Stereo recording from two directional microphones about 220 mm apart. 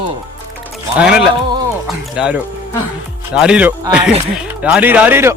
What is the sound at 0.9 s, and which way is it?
Speech, 5° right (ahead or behind).